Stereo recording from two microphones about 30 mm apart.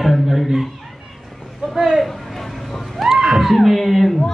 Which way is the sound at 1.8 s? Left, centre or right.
Centre.